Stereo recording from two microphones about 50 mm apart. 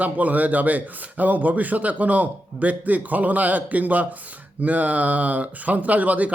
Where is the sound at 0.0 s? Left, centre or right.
Right.